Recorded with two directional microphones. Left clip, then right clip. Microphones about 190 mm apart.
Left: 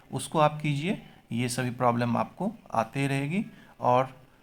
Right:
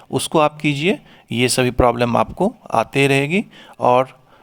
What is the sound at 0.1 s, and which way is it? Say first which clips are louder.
Speech: right 9 dB; 45° right (ahead or behind).